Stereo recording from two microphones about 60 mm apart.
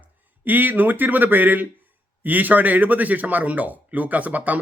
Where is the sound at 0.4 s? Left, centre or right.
Right.